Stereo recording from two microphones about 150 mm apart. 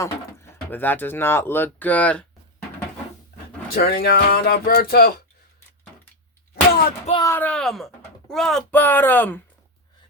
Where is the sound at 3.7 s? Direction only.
90° left.